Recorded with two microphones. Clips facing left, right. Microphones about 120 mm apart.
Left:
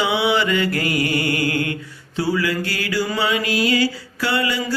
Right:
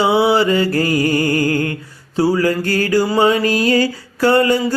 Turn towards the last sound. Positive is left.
turn(degrees=-45)  # may be behind; listen again after turning